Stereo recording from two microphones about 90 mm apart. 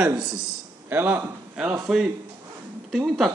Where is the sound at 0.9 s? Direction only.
20° right (ahead or behind).